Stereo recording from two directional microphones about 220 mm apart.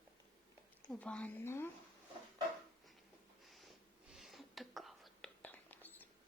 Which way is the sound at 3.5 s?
Centre (ahead or behind).